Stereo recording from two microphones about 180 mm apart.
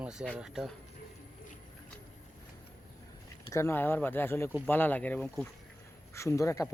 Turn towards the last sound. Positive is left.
turn(degrees=15)  # may be behind; listen again after turning